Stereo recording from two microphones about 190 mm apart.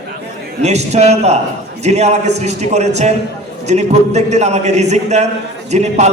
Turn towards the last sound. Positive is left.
turn(degrees=-35)  # may be behind; listen again after turning